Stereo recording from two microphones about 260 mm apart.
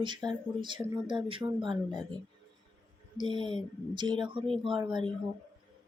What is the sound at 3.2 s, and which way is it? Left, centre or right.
Speech, centre.